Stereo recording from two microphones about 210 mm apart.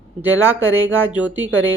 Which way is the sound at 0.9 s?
10° right (ahead or behind).